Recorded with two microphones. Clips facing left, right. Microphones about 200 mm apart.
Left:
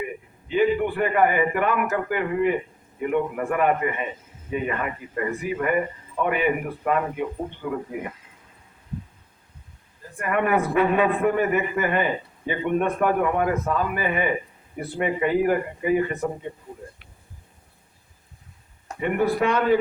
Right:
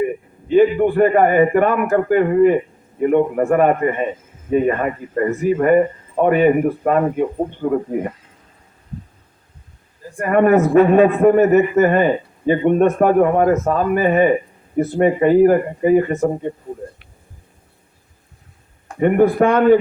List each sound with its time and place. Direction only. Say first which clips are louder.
0.0 s a man's voice: right 11 dB; 45° right (ahead or behind)
10.2 s a man's voice: right 9 dB; 45° right (ahead or behind)
18.9 s a man's voice: right 9 dB; 50° right (ahead or behind)